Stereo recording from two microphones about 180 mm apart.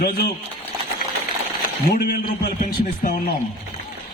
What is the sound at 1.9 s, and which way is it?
A man's voice, 55° left (ahead or behind).